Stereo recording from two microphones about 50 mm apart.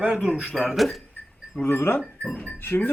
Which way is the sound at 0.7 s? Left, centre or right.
Centre.